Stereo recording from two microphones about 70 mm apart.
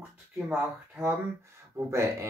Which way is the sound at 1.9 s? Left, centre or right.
Right.